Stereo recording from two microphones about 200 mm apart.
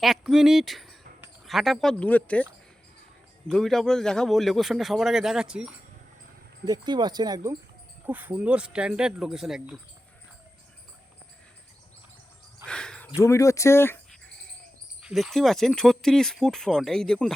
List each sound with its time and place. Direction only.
0.0 s a man's voice: centre (ahead or behind)
6.7 s a man's voice: 20° right (ahead or behind); by 9.8 s 5° right (ahead or behind)
12.6 s a sound: 5° left (ahead or behind)
13.1 s speech: 15° left (ahead or behind)
15.0 s a man's voice: centre (ahead or behind)